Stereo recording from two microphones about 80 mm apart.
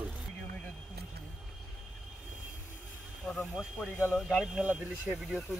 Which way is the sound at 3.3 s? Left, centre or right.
Centre.